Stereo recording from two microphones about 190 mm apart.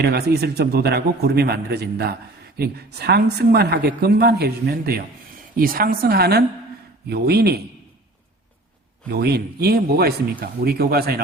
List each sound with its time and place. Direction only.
0.0 s a woman's voice: 55° right (ahead or behind)
9.0 s a woman's voice: 55° right (ahead or behind)